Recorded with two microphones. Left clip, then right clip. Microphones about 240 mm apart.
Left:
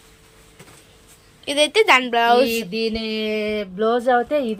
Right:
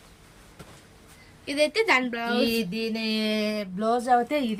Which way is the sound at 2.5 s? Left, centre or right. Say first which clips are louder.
Left 6 dB; right.